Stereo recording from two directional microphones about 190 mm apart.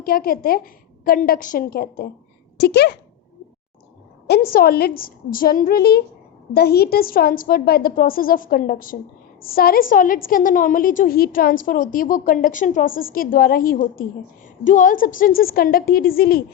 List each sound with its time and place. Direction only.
0.0 s a woman's voice: 50° left (ahead or behind)
4.3 s a woman's voice: 55° left (ahead or behind)